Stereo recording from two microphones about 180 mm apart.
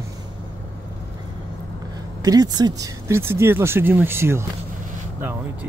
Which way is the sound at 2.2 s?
20° right (ahead or behind).